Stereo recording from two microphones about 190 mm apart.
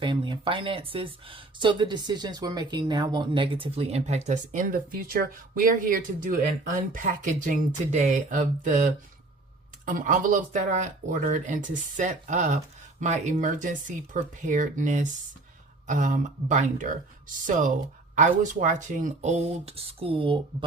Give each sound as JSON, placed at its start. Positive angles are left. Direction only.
{"t": 0.0, "sound": "speech", "side_deg": -25}